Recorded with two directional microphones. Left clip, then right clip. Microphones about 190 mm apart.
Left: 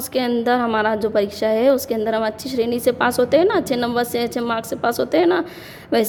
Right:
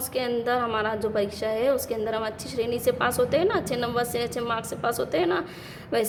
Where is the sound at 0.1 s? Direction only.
35° left (ahead or behind).